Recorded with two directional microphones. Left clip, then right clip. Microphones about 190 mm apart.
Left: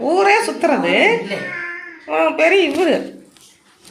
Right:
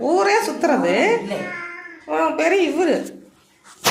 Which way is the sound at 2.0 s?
10° left (ahead or behind).